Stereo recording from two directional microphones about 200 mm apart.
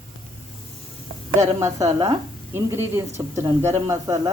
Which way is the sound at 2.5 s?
15° right (ahead or behind).